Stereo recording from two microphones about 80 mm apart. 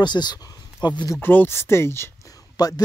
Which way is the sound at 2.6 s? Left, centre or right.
Left.